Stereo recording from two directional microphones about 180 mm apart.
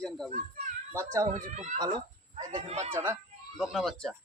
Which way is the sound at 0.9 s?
15° right (ahead or behind).